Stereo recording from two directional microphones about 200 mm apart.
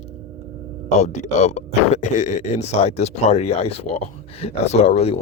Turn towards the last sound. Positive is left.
turn(degrees=30)  # may be behind; listen again after turning